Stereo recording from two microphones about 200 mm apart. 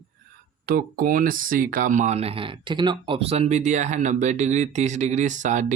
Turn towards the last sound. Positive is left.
turn(degrees=-40)  # may be behind; listen again after turning